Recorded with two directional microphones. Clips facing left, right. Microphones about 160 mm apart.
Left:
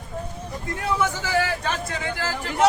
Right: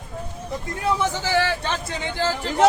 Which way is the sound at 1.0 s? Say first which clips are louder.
Even; 30° right (ahead or behind).